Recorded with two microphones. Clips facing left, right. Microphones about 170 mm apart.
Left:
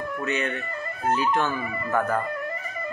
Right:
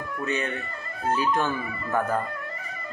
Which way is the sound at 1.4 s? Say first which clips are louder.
Left 1 dB; 15° right (ahead or behind).